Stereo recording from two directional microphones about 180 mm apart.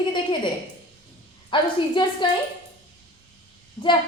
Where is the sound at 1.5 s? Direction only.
25° left (ahead or behind).